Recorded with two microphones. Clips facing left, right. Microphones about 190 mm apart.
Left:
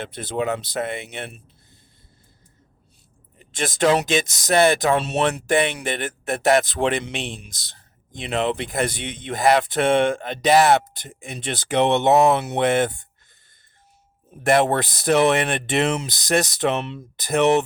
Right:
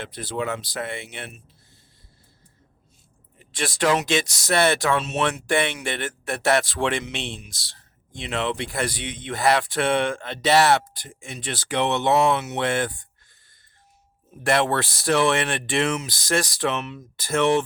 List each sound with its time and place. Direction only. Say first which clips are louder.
0.0 s speech: left 3 dB; 20° left (ahead or behind)
3.5 s speech: left 3 dB; 20° left (ahead or behind)
4.9 s speech: left 3 dB; 35° left (ahead or behind)
5.9 s speech: left 3 dB; 20° left (ahead or behind)
12.5 s speech: left 5 dB; 20° left (ahead or behind)
14.4 s speech: left 3 dB; 20° left (ahead or behind)
17.2 s speech: left 3 dB; 20° left (ahead or behind)